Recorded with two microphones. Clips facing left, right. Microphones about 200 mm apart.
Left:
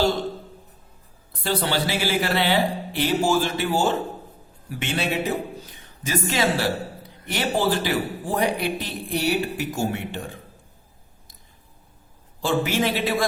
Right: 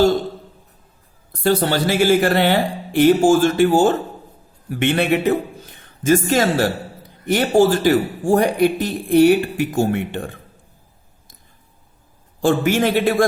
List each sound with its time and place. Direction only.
1.3 s a man's voice: 45° right (ahead or behind)
12.4 s speech: 50° right (ahead or behind)